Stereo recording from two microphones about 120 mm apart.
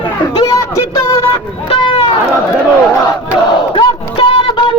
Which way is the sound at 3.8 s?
45° left (ahead or behind).